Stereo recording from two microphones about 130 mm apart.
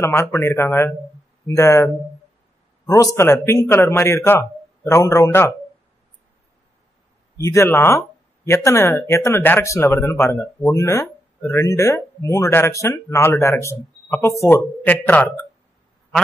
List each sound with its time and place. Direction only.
0.0 s speech: 20° left (ahead or behind)
2.9 s speech: 25° left (ahead or behind)
7.3 s speech: 20° left (ahead or behind)